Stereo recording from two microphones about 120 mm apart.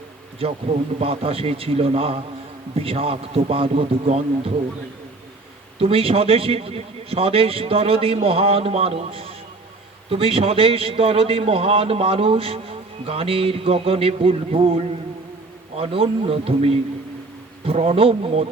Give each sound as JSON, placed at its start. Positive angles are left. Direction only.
{"t": 0.9, "sound": "a man's voice", "side_deg": -55}
{"t": 5.8, "sound": "a man's voice", "side_deg": -50}